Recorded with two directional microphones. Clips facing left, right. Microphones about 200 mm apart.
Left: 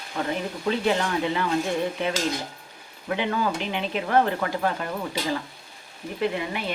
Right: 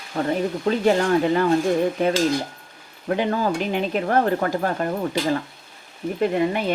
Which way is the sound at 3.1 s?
40° right (ahead or behind).